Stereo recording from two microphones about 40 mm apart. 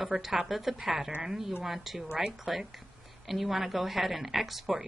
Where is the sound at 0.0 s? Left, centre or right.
Centre.